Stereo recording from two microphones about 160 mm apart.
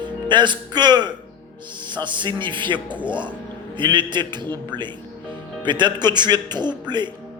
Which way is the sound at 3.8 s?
30° right (ahead or behind).